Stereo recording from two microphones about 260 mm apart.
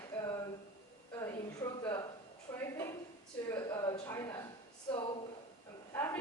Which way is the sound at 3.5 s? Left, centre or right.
Centre.